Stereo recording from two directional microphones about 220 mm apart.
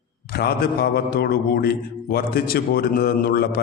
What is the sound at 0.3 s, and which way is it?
A man's voice, 45° left (ahead or behind).